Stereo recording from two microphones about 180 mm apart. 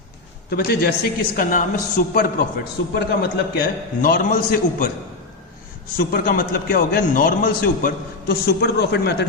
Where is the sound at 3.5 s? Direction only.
60° left (ahead or behind).